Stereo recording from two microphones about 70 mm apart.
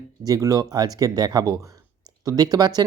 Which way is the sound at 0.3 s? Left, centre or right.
Right.